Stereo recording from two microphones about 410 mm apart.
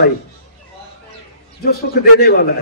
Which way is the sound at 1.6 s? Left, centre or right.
Left.